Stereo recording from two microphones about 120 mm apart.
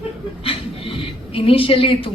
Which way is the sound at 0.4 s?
50° left (ahead or behind).